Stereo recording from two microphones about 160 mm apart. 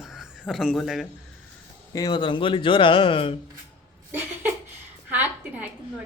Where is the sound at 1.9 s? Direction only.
25° left (ahead or behind).